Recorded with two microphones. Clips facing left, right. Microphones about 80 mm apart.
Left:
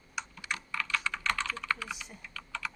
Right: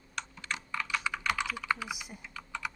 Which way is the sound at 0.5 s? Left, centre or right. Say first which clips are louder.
Even; centre.